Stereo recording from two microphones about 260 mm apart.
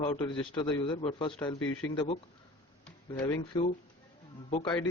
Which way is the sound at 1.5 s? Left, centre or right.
Left.